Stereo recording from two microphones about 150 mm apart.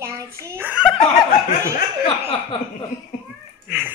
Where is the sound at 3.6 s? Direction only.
10° right (ahead or behind).